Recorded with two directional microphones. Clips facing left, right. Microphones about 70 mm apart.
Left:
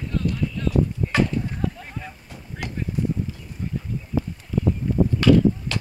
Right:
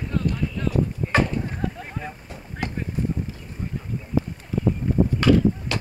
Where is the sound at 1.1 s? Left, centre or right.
Right.